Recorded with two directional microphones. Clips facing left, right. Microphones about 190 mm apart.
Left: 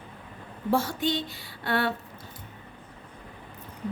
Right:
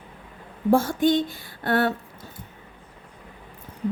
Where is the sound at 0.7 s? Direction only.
50° right (ahead or behind).